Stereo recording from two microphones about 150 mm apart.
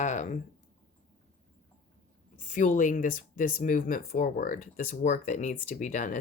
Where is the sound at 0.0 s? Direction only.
55° left (ahead or behind).